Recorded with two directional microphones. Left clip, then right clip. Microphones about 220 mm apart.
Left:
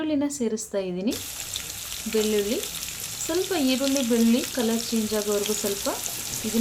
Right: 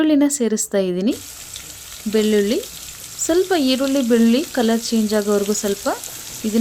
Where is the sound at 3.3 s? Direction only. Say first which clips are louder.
Right 8 dB; 40° right (ahead or behind).